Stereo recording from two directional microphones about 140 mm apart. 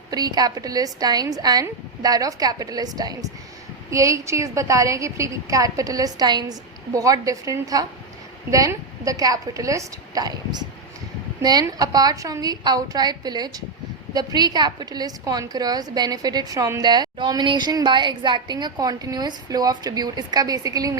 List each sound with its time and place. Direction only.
0.1 s a woman's voice: 25° right (ahead or behind)